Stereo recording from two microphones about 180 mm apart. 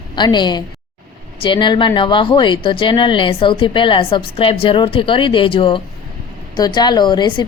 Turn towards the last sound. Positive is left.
turn(degrees=25)  # may be behind; listen again after turning